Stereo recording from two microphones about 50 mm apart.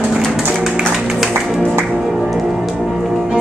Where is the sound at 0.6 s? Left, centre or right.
Centre.